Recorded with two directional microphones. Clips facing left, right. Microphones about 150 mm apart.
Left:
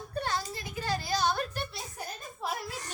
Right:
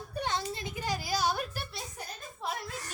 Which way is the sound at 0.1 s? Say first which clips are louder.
Even; 20° right (ahead or behind).